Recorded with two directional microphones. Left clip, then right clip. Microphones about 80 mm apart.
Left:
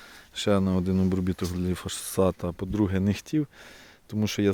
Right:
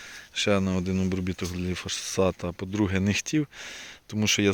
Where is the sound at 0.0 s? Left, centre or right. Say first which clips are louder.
Right 2 dB; left.